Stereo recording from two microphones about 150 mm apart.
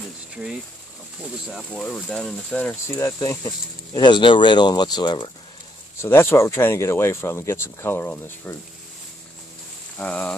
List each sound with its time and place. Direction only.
1.5 s speech: 5° left (ahead or behind); by 5.3 s 30° left (ahead or behind)
5.9 s speech: 15° left (ahead or behind)
9.9 s a sound: 10° left (ahead or behind)